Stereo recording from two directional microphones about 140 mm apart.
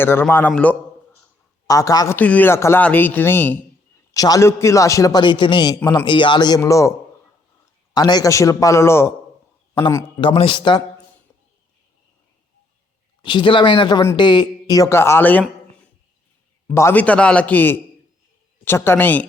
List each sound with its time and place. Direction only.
0.0 s speech: 15° left (ahead or behind)
1.6 s a man's voice: 25° left (ahead or behind)
2.1 s speech: 10° left (ahead or behind)
4.1 s a man's voice: 25° left (ahead or behind)
7.9 s a man's voice: 30° left (ahead or behind)
10.2 s speech: 40° left (ahead or behind)
13.2 s a man's voice: 35° left (ahead or behind); by 15.4 s 15° left (ahead or behind)
16.7 s speech: 15° left (ahead or behind)